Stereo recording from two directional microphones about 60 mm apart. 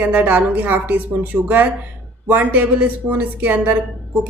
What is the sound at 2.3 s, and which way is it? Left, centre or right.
A woman's voice, right.